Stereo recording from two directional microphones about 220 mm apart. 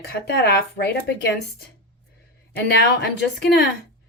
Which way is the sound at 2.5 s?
45° left (ahead or behind).